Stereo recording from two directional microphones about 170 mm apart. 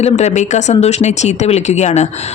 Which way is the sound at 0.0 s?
40° left (ahead or behind).